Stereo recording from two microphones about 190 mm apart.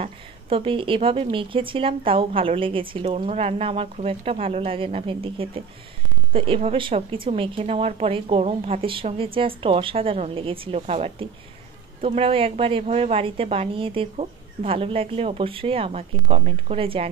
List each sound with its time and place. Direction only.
0.0 s a woman's voice: 30° right (ahead or behind)